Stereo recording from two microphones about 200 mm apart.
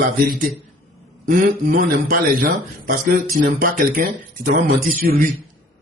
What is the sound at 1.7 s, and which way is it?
Speech, 45° right (ahead or behind).